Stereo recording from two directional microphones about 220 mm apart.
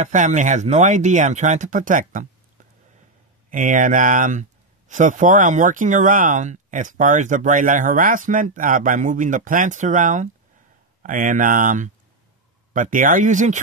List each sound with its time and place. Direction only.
0.0 s speech: 35° right (ahead or behind)
3.4 s speech: 35° right (ahead or behind)